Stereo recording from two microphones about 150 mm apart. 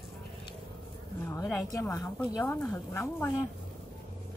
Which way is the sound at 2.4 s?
15° left (ahead or behind).